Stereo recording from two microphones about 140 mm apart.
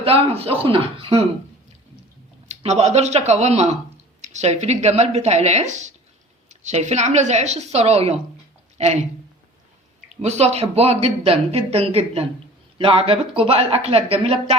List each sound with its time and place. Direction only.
0.0 s speech: 45° right (ahead or behind)
2.5 s speech: 55° right (ahead or behind)
10.2 s speech: 50° right (ahead or behind)